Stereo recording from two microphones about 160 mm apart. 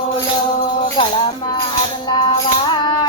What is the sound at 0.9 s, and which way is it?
Music, 30° left (ahead or behind).